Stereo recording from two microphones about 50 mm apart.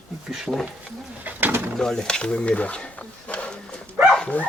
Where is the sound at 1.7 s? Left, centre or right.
Centre; by 4.5 s left.